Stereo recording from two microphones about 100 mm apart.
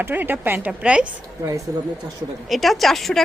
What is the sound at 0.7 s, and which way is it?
Speech, 10° right (ahead or behind).